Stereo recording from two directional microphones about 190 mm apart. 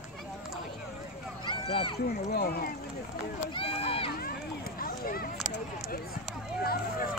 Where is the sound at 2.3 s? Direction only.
55° left (ahead or behind).